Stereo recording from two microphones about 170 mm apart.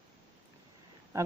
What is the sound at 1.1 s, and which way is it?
Speech, 15° right (ahead or behind).